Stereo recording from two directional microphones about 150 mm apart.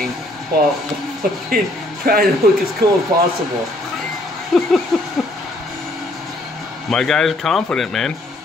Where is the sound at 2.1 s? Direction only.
85° right.